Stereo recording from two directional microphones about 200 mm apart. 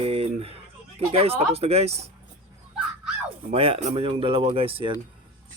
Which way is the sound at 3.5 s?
30° right (ahead or behind).